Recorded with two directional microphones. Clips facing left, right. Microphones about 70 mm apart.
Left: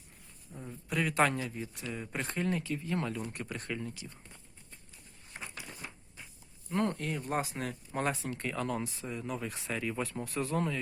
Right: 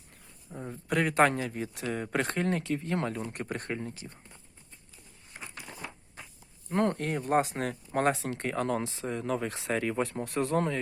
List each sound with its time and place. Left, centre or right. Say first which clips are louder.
0.5 s speech: right 5 dB; right
6.7 s speech: right 4 dB; right
8.2 s speech: right 4 dB; right
8.4 s speech: right 5 dB; right
8.8 s speech: right 5 dB; right